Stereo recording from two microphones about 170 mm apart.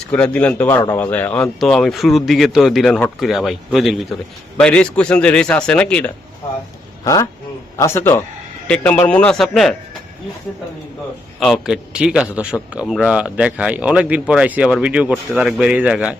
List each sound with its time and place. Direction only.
0.1 s a man's voice: 10° left (ahead or behind)
7.0 s a man's voice: 20° left (ahead or behind); by 9.7 s centre (ahead or behind)
11.3 s speech: centre (ahead or behind)